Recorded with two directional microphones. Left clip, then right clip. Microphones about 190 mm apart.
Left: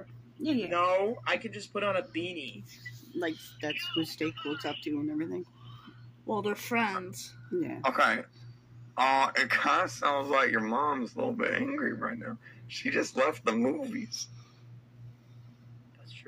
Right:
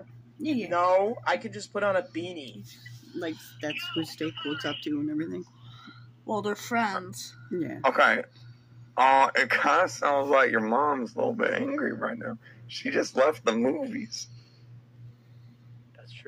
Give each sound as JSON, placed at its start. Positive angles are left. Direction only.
{"t": 0.4, "sound": "speech", "side_deg": -65}
{"t": 0.7, "sound": "a man's voice", "side_deg": 0}
{"t": 4.0, "sound": "speech", "side_deg": -35}
{"t": 6.2, "sound": "a woman's voice", "side_deg": -25}
{"t": 7.8, "sound": "a man's voice", "side_deg": 0}